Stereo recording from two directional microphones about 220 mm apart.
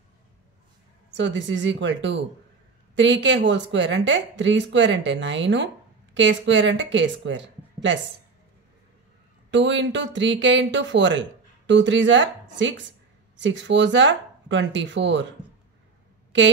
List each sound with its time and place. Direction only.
1.1 s speech: 55° right (ahead or behind)
9.5 s speech: 55° right (ahead or behind)